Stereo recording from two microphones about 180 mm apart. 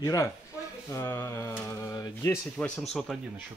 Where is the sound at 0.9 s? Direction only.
15° left (ahead or behind).